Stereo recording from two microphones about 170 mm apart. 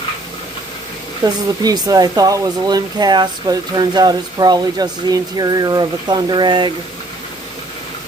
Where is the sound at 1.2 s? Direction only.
20° right (ahead or behind).